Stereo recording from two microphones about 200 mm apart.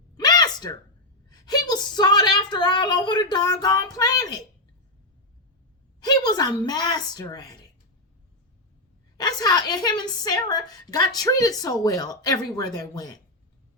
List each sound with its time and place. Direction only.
0.2 s a sound: 20° left (ahead or behind)
1.3 s speech: 20° left (ahead or behind)
6.1 s a woman's voice: 20° left (ahead or behind)
9.1 s a woman's voice: 20° left (ahead or behind)